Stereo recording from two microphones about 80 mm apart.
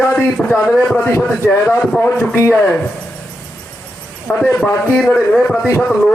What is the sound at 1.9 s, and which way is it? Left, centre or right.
Speech, left.